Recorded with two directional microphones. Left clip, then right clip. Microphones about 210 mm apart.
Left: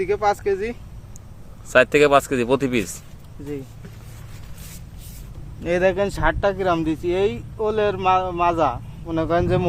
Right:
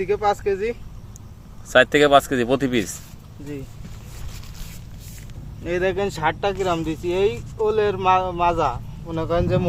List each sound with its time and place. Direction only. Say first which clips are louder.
0.0 s speech: even; 40° left (ahead or behind)
1.7 s speech: even; 5° left (ahead or behind)
5.6 s speech: left 3 dB; 55° left (ahead or behind)